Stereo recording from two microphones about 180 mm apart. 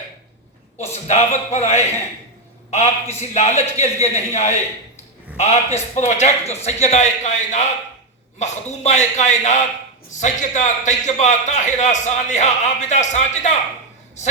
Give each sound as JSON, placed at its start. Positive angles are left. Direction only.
{"t": 1.0, "sound": "a man's voice", "side_deg": 40}